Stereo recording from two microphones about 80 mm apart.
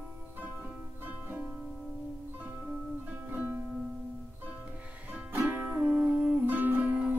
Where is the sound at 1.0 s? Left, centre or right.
Right.